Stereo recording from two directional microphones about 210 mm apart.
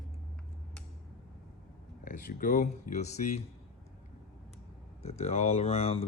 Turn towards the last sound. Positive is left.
turn(degrees=30)  # may be behind; listen again after turning